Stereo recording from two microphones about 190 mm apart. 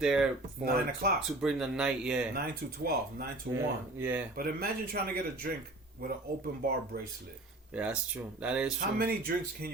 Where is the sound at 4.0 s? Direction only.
10° right (ahead or behind).